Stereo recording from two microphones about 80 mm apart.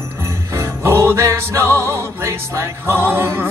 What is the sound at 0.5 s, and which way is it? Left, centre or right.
Music, right.